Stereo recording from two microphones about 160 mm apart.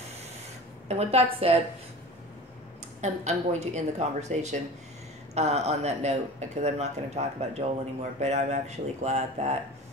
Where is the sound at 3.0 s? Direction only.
45° right (ahead or behind).